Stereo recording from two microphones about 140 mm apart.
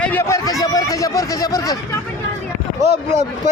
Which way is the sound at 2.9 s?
55° right (ahead or behind).